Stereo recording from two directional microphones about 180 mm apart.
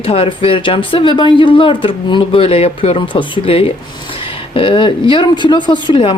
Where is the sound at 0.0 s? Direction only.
30° left (ahead or behind).